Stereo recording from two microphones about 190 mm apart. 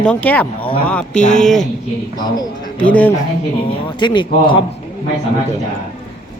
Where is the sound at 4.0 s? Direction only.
25° left (ahead or behind).